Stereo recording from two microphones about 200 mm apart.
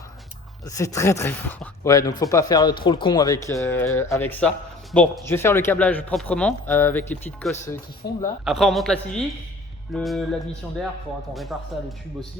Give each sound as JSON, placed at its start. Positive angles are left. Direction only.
{"t": 0.6, "sound": "speech", "side_deg": 15}
{"t": 8.0, "sound": "speech", "side_deg": 55}
{"t": 8.4, "sound": "a man's voice", "side_deg": 0}
{"t": 11.3, "sound": "a man's voice", "side_deg": 0}